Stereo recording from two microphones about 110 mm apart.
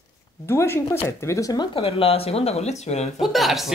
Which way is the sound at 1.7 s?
60° left (ahead or behind).